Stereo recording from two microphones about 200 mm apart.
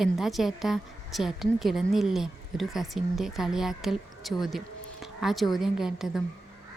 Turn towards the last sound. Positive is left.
turn(degrees=0)  # may be behind; listen again after turning